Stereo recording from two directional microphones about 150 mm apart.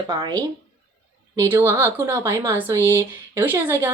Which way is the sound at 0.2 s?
25° right (ahead or behind).